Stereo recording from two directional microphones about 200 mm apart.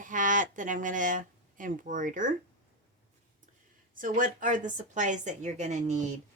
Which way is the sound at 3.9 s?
40° right (ahead or behind).